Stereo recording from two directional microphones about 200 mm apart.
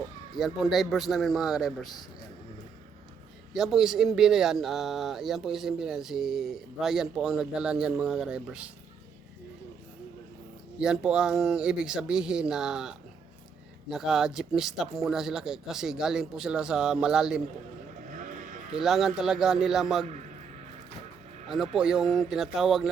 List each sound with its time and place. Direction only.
0.3 s speech: centre (ahead or behind)
3.5 s speech: centre (ahead or behind)
10.8 s speech: 5° right (ahead or behind)
18.1 s sheep: 40° right (ahead or behind)
18.8 s speech: centre (ahead or behind)
21.4 s speech: centre (ahead or behind)